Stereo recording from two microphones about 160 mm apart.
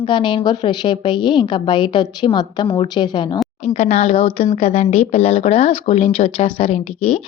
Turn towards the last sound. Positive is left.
turn(degrees=40)  # may be behind; listen again after turning